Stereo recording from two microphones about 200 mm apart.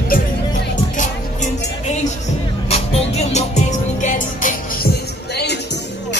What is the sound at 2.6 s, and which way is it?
Music, 30° left (ahead or behind).